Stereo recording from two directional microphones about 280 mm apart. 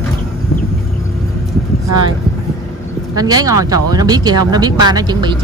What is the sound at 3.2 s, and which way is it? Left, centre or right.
Speech, centre.